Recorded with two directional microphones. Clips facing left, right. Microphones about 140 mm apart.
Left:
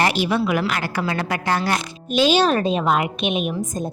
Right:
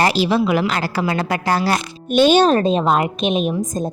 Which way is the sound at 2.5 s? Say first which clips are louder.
Right 4 dB; 35° right (ahead or behind).